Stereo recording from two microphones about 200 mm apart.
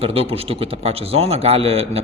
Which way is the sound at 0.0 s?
30° right (ahead or behind).